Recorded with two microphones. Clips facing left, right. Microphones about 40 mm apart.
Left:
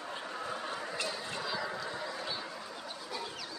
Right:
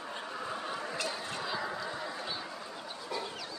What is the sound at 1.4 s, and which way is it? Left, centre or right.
Fowl, centre.